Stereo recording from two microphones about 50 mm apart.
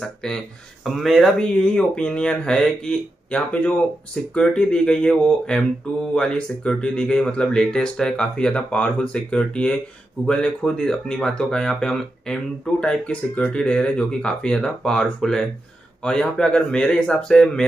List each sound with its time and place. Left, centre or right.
0.2 s speech: centre
0.8 s speech: centre
1.4 s speech: left
8.6 s speech: left; by 12.4 s centre
12.8 s speech: left
13.6 s speech: centre